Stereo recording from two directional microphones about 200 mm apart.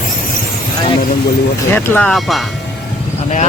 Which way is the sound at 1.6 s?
10° left (ahead or behind).